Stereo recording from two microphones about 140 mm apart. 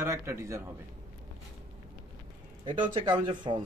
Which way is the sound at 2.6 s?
35° right (ahead or behind).